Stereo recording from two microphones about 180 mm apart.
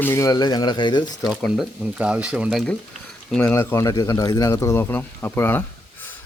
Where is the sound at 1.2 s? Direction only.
Centre (ahead or behind).